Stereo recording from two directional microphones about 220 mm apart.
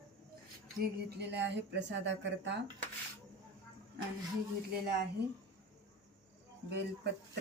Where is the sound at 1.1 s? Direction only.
50° right (ahead or behind).